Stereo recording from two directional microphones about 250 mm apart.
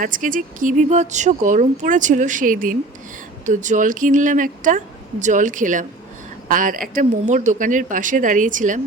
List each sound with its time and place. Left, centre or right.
0.0 s speech: right